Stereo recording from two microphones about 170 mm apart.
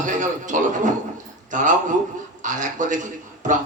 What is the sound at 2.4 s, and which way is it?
Speech, 50° right (ahead or behind).